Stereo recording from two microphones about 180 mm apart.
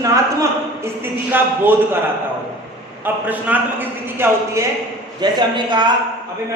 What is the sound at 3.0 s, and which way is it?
A man's voice, 10° right (ahead or behind).